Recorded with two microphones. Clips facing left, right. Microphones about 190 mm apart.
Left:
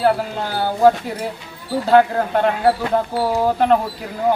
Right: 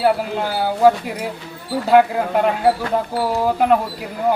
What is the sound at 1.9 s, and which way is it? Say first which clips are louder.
Speech: even; 10° right (ahead or behind).